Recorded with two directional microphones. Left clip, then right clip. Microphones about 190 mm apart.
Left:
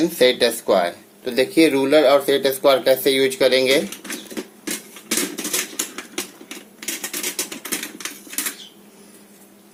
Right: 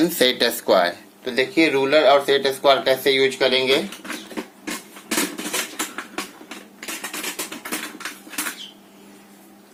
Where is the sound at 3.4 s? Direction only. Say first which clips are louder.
Left 3 dB; 35° left (ahead or behind).